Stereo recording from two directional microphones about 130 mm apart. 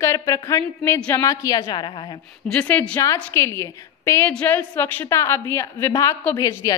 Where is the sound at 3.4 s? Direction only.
20° left (ahead or behind).